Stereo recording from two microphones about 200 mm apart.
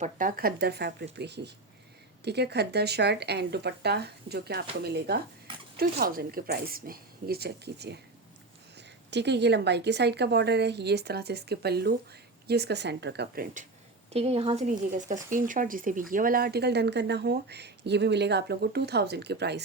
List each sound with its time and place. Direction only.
0.0 s a woman's voice: 40° right (ahead or behind)
9.0 s a woman's voice: 60° right (ahead or behind); by 13.7 s 45° right (ahead or behind)
14.1 s a woman's voice: 30° right (ahead or behind); by 19.6 s 55° right (ahead or behind)